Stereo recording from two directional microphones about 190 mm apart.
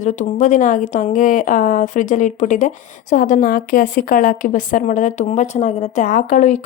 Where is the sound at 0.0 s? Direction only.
40° left (ahead or behind).